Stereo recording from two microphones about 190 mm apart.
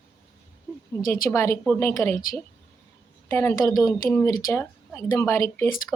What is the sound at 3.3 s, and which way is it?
A woman's voice, 10° left (ahead or behind).